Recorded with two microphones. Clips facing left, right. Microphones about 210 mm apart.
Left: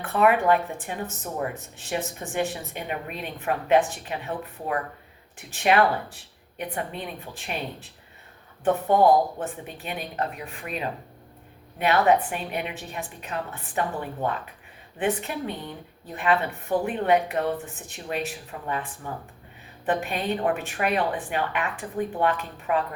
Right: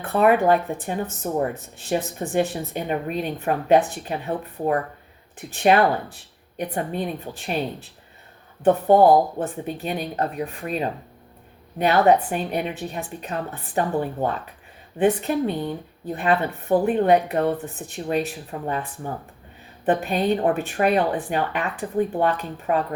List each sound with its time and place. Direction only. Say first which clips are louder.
0.0 s a woman's voice: right 3 dB; 35° right (ahead or behind)